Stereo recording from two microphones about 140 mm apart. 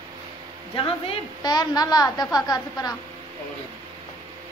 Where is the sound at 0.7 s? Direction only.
40° left (ahead or behind).